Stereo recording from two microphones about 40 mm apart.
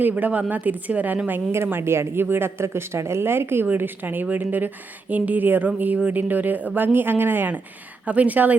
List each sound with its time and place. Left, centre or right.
0.2 s speech: right
1.5 s speech: right
3.8 s speech: right
8.0 s speech: right